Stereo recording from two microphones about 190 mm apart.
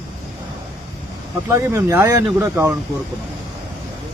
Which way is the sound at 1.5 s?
15° right (ahead or behind).